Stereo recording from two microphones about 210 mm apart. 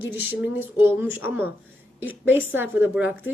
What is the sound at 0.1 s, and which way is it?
A woman's voice, 10° right (ahead or behind).